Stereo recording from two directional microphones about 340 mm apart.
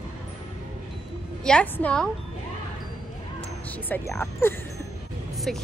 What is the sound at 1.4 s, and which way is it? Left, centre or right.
Speech, centre.